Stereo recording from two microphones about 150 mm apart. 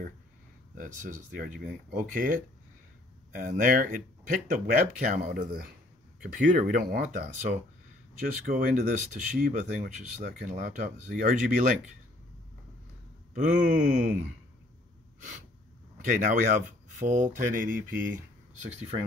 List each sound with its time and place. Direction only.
0.7 s speech: 60° right (ahead or behind)
3.3 s speech: 60° right (ahead or behind)
9.4 s speech: 55° right (ahead or behind)
13.3 s speech: 65° right (ahead or behind)
16.0 s speech: 55° right (ahead or behind)